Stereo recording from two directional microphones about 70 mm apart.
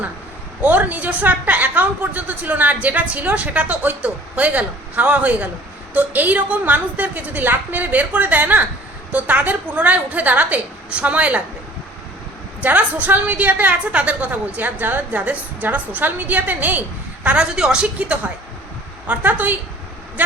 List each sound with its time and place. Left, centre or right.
0.6 s a woman's voice: right
12.6 s a woman's voice: right
17.2 s a woman's voice: centre